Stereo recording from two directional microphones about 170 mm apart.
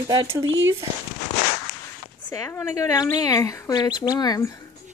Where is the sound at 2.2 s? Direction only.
15° left (ahead or behind).